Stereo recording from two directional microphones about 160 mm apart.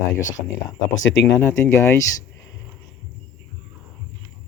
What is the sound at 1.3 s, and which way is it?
Speech, 15° left (ahead or behind).